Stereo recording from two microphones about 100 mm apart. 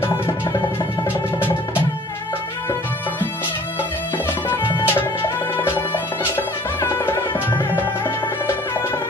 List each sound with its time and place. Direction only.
4.7 s music: 25° left (ahead or behind)